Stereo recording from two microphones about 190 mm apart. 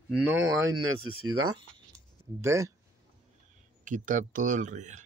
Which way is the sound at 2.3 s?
15° right (ahead or behind).